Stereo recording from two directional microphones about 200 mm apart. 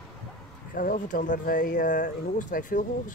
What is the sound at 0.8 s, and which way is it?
Speech, 40° left (ahead or behind).